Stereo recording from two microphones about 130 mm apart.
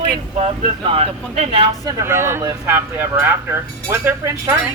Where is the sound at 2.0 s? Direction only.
20° right (ahead or behind).